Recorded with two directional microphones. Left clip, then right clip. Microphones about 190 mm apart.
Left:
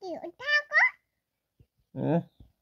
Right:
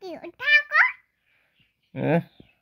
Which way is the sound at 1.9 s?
90° right.